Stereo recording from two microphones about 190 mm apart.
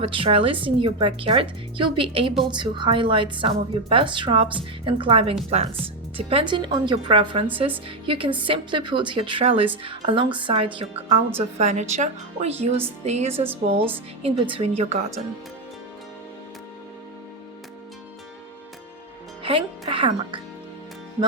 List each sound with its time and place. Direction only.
0.0 s a woman's voice: 30° right (ahead or behind)
19.4 s speech: 25° right (ahead or behind)